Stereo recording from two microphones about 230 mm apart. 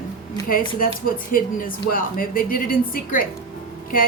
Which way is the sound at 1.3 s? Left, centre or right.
Left.